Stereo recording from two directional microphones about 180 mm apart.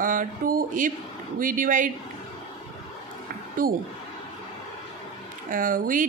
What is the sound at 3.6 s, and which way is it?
Speech, 50° right (ahead or behind).